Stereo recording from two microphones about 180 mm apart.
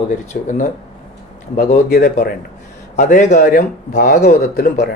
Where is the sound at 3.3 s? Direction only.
60° left (ahead or behind).